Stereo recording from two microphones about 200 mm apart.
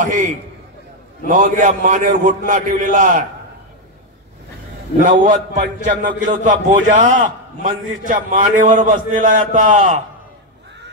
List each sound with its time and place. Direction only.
0.0 s a man's voice: 40° right (ahead or behind)
5.0 s a man's voice: 40° right (ahead or behind)